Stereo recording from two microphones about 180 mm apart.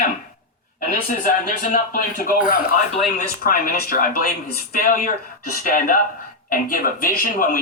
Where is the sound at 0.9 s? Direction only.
50° left (ahead or behind).